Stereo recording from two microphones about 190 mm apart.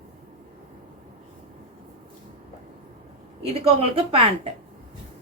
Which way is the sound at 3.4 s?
30° right (ahead or behind).